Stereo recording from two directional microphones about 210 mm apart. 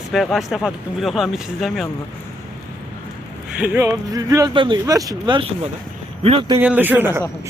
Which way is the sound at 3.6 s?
10° right (ahead or behind).